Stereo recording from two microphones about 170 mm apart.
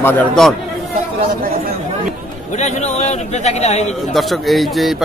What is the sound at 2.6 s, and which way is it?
A man's voice, 40° left (ahead or behind).